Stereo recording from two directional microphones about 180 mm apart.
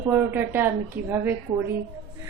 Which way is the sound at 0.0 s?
10° right (ahead or behind).